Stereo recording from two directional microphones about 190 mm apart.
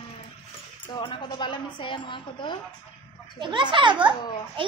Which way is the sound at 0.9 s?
25° left (ahead or behind).